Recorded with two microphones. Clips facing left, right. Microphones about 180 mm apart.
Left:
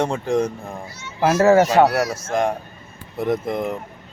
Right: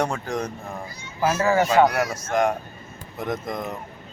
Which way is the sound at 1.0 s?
65° left (ahead or behind).